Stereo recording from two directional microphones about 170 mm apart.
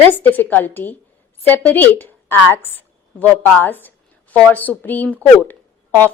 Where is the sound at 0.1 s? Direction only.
10° left (ahead or behind).